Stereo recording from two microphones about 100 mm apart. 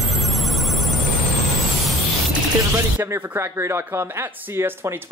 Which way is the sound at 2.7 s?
25° right (ahead or behind).